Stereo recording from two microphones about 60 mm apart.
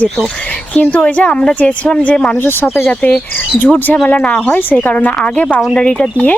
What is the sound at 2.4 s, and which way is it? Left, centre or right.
Speech, left.